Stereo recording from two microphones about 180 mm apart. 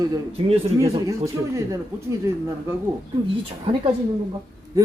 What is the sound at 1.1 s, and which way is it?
A man's voice, 20° right (ahead or behind).